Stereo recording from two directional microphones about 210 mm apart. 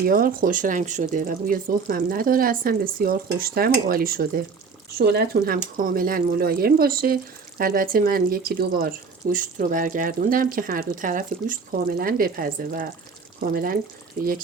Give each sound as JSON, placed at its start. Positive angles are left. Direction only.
{"t": 0.0, "sound": "speech", "side_deg": -45}